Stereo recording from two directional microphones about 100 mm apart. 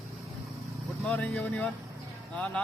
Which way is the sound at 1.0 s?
15° left (ahead or behind).